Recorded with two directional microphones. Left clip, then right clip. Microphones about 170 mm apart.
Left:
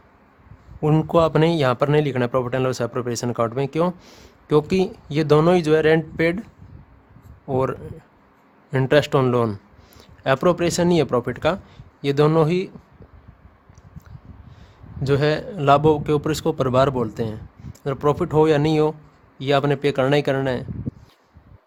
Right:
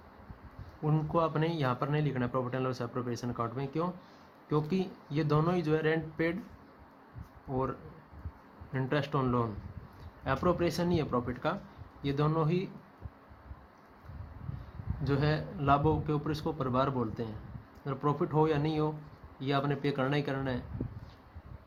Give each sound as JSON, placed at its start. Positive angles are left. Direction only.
{"t": 0.8, "sound": "a man's voice", "side_deg": 90}
{"t": 7.5, "sound": "a man's voice", "side_deg": 90}
{"t": 15.0, "sound": "a man's voice", "side_deg": 90}